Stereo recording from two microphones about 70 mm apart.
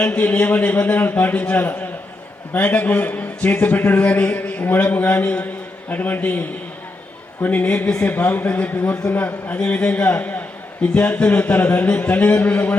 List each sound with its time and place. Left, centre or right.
0.0 s a man's voice: left
7.4 s a man's voice: left